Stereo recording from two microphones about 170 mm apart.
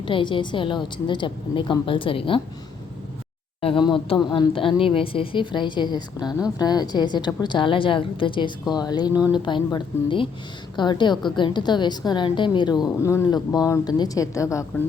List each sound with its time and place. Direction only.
0.0 s a woman's voice: 30° left (ahead or behind)
3.6 s a woman's voice: 30° left (ahead or behind)